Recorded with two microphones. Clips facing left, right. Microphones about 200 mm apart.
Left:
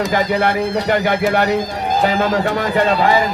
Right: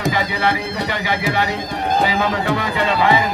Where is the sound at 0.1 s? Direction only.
50° left (ahead or behind).